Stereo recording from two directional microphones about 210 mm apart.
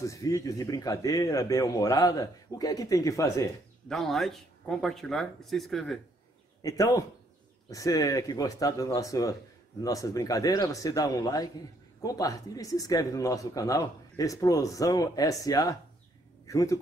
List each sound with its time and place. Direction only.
0.0 s speech: 15° left (ahead or behind)
3.9 s speech: centre (ahead or behind)
6.6 s a man's voice: 15° left (ahead or behind)